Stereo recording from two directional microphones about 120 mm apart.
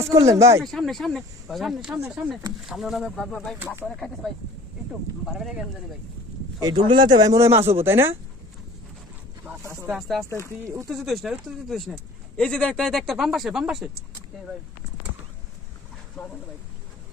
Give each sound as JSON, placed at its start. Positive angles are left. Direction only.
{"t": 0.3, "sound": "speech", "side_deg": -25}
{"t": 0.7, "sound": "speech", "side_deg": 0}
{"t": 6.6, "sound": "speech", "side_deg": -40}
{"t": 7.3, "sound": "speech", "side_deg": -20}
{"t": 9.4, "sound": "speech", "side_deg": -20}
{"t": 9.9, "sound": "speech", "side_deg": 0}
{"t": 10.2, "sound": "speech", "side_deg": 20}
{"t": 10.9, "sound": "speech", "side_deg": 0}